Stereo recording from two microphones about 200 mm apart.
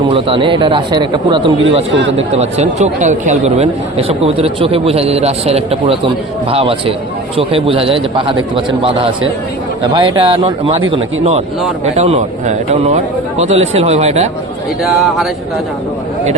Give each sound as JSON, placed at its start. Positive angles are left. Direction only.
{"t": 0.1, "sound": "a man's voice", "side_deg": -25}
{"t": 1.9, "sound": "speech", "side_deg": -65}
{"t": 2.1, "sound": "a man's voice", "side_deg": -35}
{"t": 14.8, "sound": "speech", "side_deg": 0}